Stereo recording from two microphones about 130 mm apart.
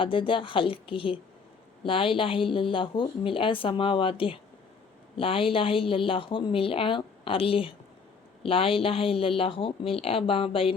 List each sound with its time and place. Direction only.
0.0 s a woman's voice: 40° left (ahead or behind)